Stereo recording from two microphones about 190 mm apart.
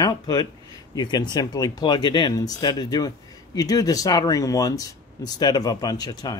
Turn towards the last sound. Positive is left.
turn(degrees=20)  # may be behind; listen again after turning